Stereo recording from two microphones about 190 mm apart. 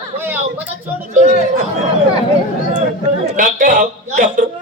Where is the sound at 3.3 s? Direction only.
45° right (ahead or behind).